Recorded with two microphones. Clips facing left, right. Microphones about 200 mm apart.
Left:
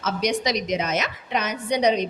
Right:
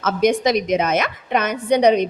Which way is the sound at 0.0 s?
50° right (ahead or behind).